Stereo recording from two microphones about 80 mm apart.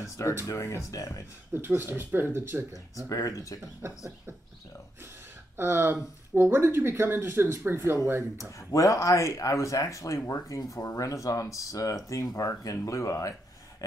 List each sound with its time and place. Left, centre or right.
0.5 s speech: left
1.5 s speech: right
2.7 s speech: left
5.6 s speech: right
8.4 s speech: left
10.6 s speech: left